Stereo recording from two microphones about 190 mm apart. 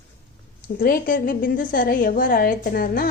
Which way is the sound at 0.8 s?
50° left (ahead or behind).